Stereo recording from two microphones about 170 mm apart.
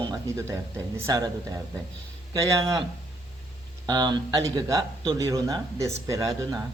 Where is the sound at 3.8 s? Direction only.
25° right (ahead or behind).